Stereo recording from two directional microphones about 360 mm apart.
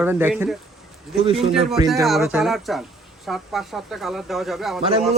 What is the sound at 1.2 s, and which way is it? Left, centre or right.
Speech, centre.